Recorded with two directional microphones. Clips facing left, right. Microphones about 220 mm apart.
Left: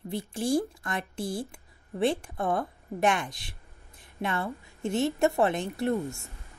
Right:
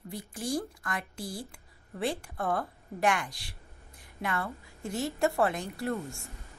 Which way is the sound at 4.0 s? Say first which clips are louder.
Left 3 dB; 25° left (ahead or behind).